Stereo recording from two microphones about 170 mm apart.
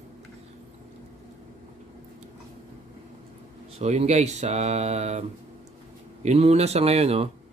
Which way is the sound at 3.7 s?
40° right (ahead or behind).